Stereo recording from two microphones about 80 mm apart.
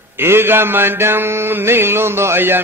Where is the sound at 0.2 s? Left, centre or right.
Right.